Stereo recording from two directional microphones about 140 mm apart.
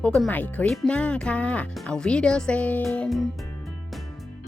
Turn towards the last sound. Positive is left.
turn(degrees=0)  # may be behind; listen again after turning